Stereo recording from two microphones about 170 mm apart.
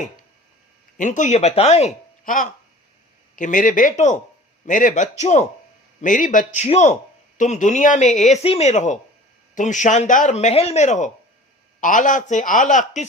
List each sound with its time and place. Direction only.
0.9 s a man's voice: 45° left (ahead or behind)